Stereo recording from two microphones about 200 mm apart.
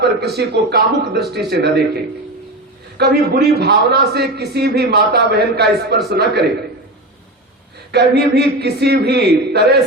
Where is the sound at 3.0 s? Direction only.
55° right (ahead or behind).